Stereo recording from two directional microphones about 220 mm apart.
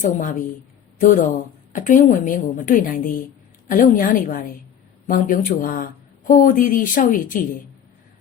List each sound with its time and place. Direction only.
0.1 s speech: 35° left (ahead or behind)